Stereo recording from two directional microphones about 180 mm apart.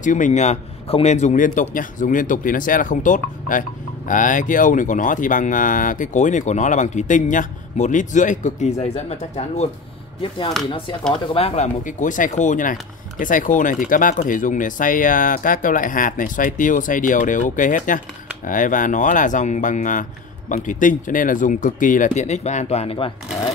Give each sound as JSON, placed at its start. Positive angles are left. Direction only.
{"t": 0.0, "sound": "speech", "side_deg": 45}
{"t": 11.3, "sound": "speech", "side_deg": 35}